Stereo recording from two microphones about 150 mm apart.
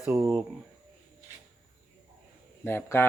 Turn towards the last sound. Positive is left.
turn(degrees=15)  # may be behind; listen again after turning